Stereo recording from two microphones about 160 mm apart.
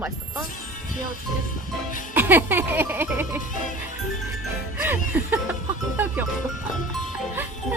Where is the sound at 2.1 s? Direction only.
10° right (ahead or behind).